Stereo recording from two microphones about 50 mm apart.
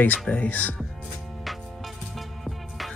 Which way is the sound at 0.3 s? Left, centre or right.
Left.